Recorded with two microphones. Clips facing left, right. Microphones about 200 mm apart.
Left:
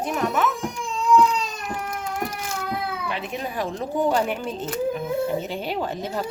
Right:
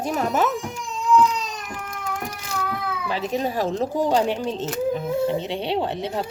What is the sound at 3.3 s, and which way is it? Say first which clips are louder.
Speech: right 8 dB; 30° right (ahead or behind).